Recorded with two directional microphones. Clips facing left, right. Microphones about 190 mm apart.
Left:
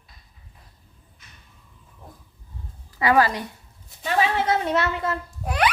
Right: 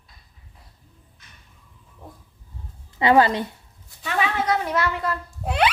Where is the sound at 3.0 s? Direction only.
25° right (ahead or behind).